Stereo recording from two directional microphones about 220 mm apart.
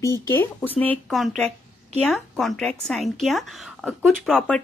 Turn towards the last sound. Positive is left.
turn(degrees=0)  # may be behind; listen again after turning